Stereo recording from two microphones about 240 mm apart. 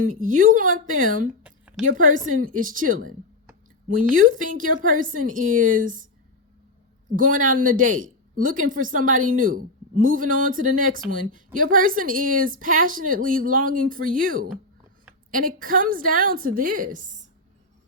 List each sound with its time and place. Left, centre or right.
0.0 s speech: right
1.5 s a sound: centre
1.9 s speech: right
4.1 s speech: right
7.1 s speech: right